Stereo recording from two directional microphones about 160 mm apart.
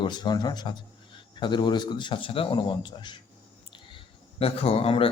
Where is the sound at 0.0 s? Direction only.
25° left (ahead or behind).